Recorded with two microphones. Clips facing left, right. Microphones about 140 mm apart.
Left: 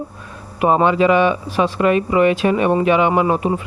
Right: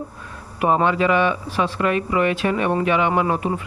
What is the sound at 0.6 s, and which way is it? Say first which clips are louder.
Speech: left 4 dB; 20° left (ahead or behind).